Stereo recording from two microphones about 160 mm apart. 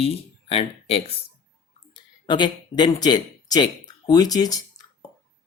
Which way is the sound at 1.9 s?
30° left (ahead or behind).